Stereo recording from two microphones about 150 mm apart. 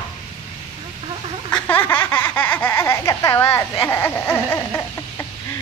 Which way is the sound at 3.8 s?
15° left (ahead or behind).